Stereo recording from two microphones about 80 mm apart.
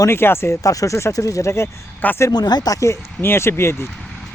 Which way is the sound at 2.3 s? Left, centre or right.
Left.